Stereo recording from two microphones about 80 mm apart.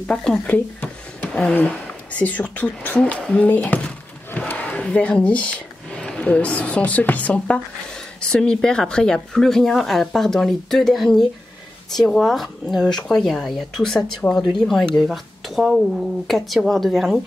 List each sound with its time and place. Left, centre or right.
0.0 s speech: centre
1.7 s speech: centre